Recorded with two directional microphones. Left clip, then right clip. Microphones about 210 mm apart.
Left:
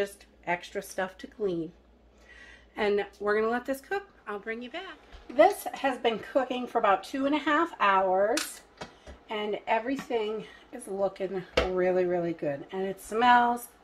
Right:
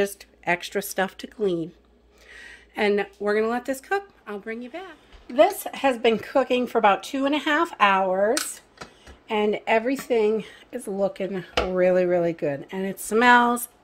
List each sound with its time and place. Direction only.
0.0 s a woman's voice: 50° right (ahead or behind)
2.7 s speech: 35° right (ahead or behind)
5.3 s speech: 55° right (ahead or behind)
9.3 s a woman's voice: 55° right (ahead or behind)